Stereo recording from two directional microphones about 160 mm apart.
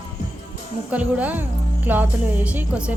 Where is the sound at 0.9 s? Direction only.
10° right (ahead or behind).